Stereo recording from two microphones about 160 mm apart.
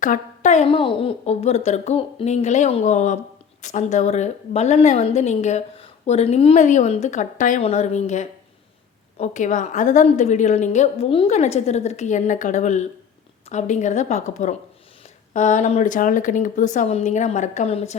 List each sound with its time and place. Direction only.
0.0 s a woman's voice: 50° left (ahead or behind)
0.7 s a woman's voice: 35° left (ahead or behind); by 7.6 s 55° left (ahead or behind)
7.6 s a woman's voice: 45° left (ahead or behind)